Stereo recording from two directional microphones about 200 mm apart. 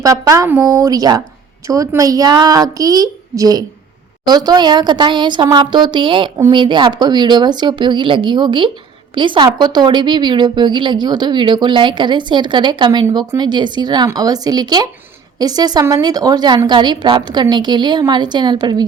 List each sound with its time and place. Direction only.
0.0 s a woman's voice: 15° right (ahead or behind)